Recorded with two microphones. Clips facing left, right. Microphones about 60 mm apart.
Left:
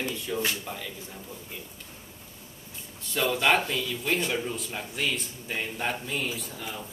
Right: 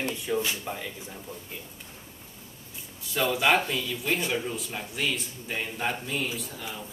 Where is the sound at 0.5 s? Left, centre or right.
Centre.